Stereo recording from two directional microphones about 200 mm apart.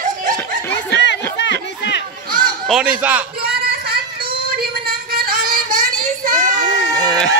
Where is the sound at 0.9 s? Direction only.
60° left (ahead or behind).